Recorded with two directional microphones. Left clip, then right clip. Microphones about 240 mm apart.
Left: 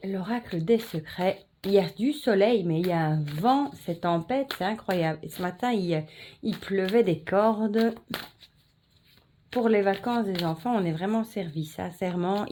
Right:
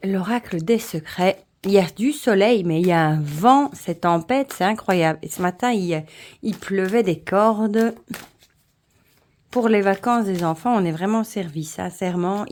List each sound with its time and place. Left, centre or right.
0.0 s speech: right
9.6 s speech: right